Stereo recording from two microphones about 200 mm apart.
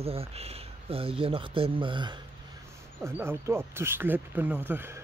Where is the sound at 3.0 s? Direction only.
10° right (ahead or behind).